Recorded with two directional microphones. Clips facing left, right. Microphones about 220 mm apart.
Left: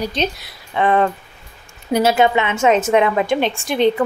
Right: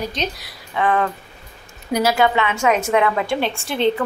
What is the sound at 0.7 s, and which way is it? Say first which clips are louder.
A woman's voice: left 3 dB; 25° left (ahead or behind).